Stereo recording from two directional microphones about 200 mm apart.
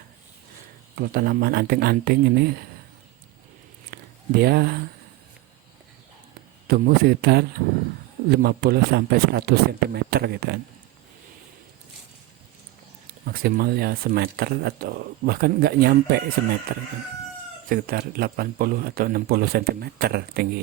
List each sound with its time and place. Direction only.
0.9 s speech: 45° right (ahead or behind)
3.9 s a sound: 50° right (ahead or behind)
6.7 s speech: 50° right (ahead or behind)
13.1 s speech: 50° right (ahead or behind)